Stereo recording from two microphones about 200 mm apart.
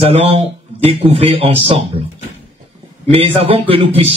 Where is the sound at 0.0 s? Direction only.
30° right (ahead or behind).